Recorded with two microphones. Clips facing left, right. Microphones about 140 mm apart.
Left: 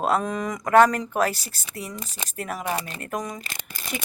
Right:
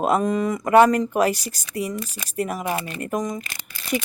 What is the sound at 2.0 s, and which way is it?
Speech, 25° left (ahead or behind).